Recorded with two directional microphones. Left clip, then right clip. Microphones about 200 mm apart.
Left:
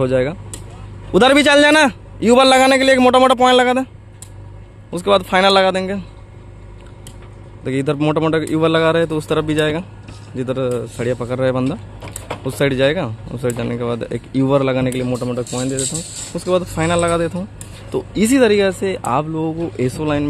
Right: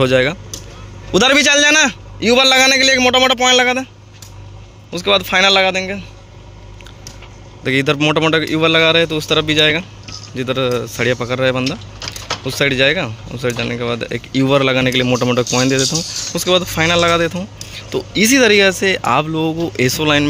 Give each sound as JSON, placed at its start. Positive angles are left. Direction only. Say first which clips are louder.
{"t": 0.0, "sound": "speech", "louder": "right 4 dB", "side_deg": 0}
{"t": 3.0, "sound": "a man's voice", "louder": "left 1 dB", "side_deg": 30}
{"t": 4.9, "sound": "a man's voice", "louder": "even", "side_deg": 15}
{"t": 7.6, "sound": "speech", "louder": "right 4 dB", "side_deg": 5}
{"t": 15.0, "sound": "speech", "louder": "right 7 dB", "side_deg": -10}
{"t": 16.3, "sound": "speech", "louder": "right 2 dB", "side_deg": 0}